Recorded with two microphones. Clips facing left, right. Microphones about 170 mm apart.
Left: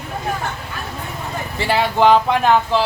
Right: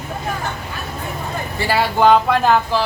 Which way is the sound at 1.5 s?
25° left (ahead or behind).